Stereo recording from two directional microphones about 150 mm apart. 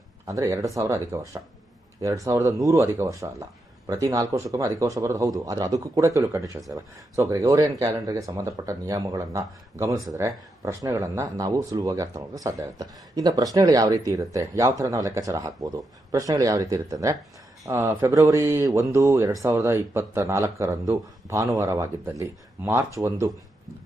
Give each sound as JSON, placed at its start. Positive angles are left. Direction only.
{"t": 0.3, "sound": "speech", "side_deg": -20}